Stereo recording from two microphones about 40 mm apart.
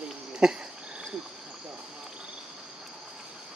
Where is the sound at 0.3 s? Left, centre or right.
Centre.